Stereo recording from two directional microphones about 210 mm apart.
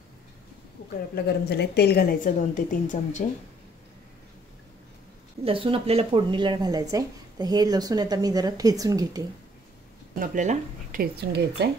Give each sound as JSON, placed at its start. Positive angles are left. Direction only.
{"t": 1.1, "sound": "a woman's voice", "side_deg": 50}
{"t": 5.4, "sound": "speech", "side_deg": -25}
{"t": 10.1, "sound": "speech", "side_deg": -35}